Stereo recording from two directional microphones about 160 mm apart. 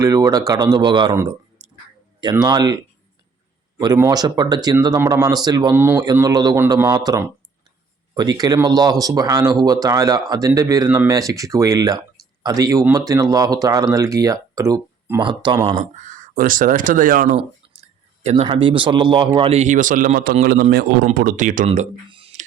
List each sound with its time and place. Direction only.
0.0 s speech: 20° right (ahead or behind)
1.6 s a sound: 30° right (ahead or behind)
2.4 s speech: 25° right (ahead or behind)
3.9 s speech: 20° right (ahead or behind)
15.2 s speech: 30° right (ahead or behind)
16.0 s speech: 50° right (ahead or behind)
18.2 s a sound: 45° right (ahead or behind)
18.4 s speech: 35° right (ahead or behind); by 20.3 s 60° right (ahead or behind)
20.4 s a man's voice: 75° right (ahead or behind)
21.2 s speech: 55° right (ahead or behind)
21.7 s speech: 35° right (ahead or behind)